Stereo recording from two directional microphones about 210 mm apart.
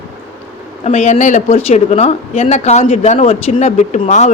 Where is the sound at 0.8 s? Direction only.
30° left (ahead or behind).